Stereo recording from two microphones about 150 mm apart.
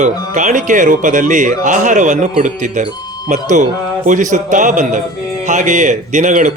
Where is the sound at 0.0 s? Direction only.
55° right (ahead or behind).